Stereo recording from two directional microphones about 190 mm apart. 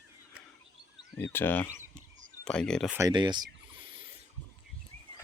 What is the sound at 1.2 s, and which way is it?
Speech, 10° left (ahead or behind).